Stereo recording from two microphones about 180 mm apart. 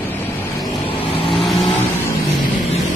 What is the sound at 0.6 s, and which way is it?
Vehicle, 30° left (ahead or behind).